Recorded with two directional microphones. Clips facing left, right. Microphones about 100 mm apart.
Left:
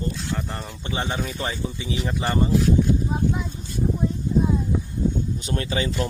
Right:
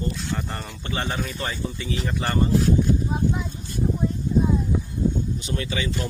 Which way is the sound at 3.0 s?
Centre (ahead or behind).